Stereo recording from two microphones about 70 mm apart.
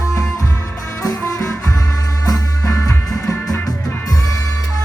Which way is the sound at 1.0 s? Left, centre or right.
Left.